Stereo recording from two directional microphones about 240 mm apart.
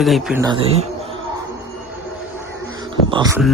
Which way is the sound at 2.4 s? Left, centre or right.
Centre.